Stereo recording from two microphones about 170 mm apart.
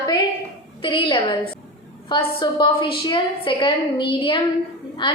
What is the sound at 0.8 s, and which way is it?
A woman's voice, 30° left (ahead or behind).